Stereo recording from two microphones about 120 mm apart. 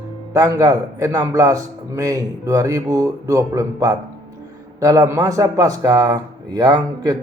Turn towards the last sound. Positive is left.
turn(degrees=-35)  # may be behind; listen again after turning